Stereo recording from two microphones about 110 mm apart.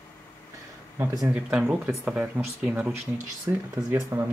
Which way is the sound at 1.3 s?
10° right (ahead or behind).